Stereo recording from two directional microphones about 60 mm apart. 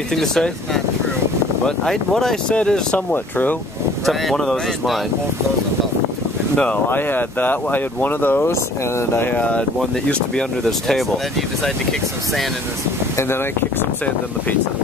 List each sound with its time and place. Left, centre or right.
0.1 s speech: centre
1.9 s speech: centre
4.0 s speech: centre
6.5 s speech: left
6.9 s speech: left
8.5 s speech: left
9.3 s speech: left